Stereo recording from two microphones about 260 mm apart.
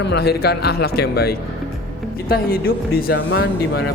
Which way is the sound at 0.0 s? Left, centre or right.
Left.